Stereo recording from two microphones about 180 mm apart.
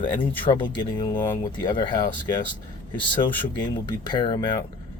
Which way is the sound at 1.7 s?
25° left (ahead or behind).